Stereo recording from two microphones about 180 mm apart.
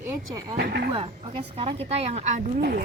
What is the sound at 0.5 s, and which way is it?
Speech, 70° right (ahead or behind).